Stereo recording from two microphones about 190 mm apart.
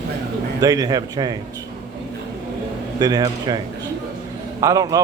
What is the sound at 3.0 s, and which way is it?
Speech, 20° right (ahead or behind).